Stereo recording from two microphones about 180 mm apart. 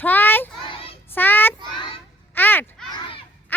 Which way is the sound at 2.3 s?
10° left (ahead or behind).